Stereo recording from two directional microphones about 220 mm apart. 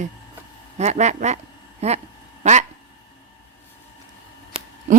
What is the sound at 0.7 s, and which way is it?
Speech, 30° right (ahead or behind).